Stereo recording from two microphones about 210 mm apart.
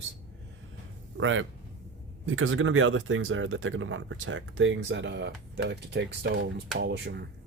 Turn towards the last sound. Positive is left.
turn(degrees=-55)  # may be behind; listen again after turning